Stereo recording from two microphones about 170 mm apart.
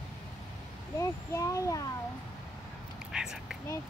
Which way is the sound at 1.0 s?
20° left (ahead or behind).